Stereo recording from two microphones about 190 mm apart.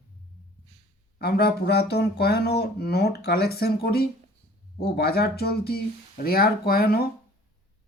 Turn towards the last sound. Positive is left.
turn(degrees=55)  # may be behind; listen again after turning